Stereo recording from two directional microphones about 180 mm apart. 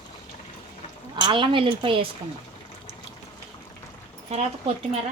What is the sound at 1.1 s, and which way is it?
Speech, 25° right (ahead or behind).